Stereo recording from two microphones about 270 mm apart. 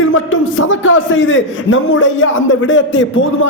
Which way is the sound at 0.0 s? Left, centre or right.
Left.